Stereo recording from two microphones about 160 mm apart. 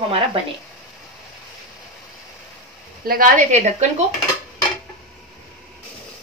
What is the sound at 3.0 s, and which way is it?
Speech, 60° right (ahead or behind).